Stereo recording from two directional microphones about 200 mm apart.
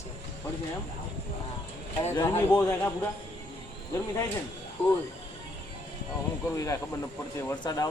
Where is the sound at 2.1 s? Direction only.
15° left (ahead or behind).